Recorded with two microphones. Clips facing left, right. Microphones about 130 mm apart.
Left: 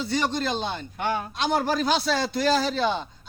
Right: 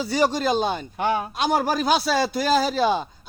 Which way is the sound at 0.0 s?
10° right (ahead or behind).